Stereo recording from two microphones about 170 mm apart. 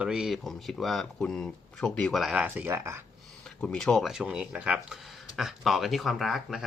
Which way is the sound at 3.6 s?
5° left (ahead or behind).